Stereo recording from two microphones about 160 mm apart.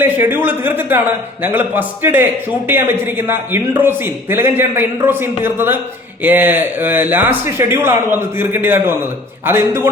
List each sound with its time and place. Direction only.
0.0 s a man's voice: 10° right (ahead or behind)